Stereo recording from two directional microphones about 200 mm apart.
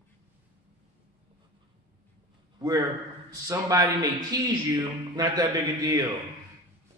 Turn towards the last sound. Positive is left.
turn(degrees=-20)  # may be behind; listen again after turning